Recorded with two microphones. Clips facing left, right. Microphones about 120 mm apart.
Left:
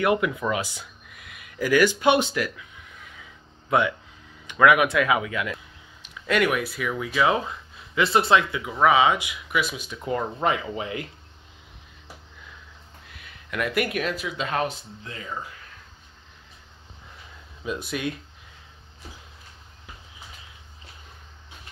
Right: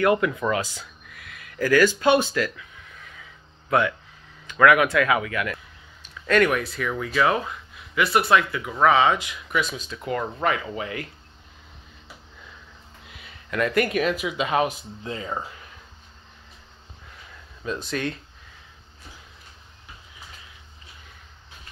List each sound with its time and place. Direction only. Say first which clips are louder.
0.0 s speech: right 2 dB; 15° left (ahead or behind)
4.5 s speech: right 1 dB; 15° left (ahead or behind)
10.0 s speech: even; 25° left (ahead or behind)
13.1 s speech: right 3 dB; centre (ahead or behind)
14.1 s speech: right 4 dB; 10° right (ahead or behind)
15.0 s speech: right 5 dB; 30° right (ahead or behind)
17.6 s speech: right 1 dB; 10° left (ahead or behind)